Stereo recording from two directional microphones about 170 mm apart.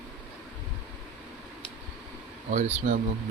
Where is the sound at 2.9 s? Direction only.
50° right (ahead or behind).